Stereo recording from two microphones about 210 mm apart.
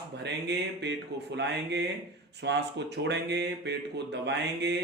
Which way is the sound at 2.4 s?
55° right (ahead or behind).